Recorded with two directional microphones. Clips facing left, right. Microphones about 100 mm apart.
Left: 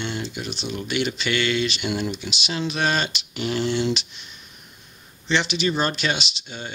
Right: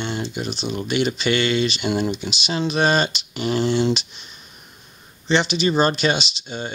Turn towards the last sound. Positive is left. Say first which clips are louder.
# right 5 dB
turn(degrees=-30)  # may be behind; listen again after turning